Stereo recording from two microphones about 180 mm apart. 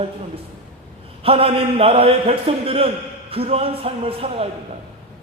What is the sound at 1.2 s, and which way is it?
A man's voice, 30° right (ahead or behind).